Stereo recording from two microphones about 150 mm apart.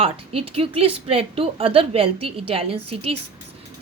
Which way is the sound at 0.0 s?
40° right (ahead or behind).